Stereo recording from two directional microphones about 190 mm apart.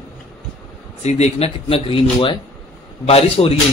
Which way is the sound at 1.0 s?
35° left (ahead or behind).